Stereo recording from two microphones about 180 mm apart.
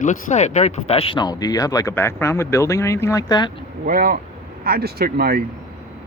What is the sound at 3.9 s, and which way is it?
Speech, 55° right (ahead or behind).